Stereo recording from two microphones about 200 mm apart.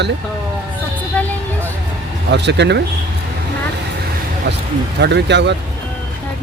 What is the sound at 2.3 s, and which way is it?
Speech, 60° right (ahead or behind).